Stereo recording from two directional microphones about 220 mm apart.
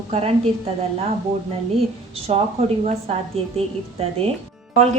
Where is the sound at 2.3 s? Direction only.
30° right (ahead or behind).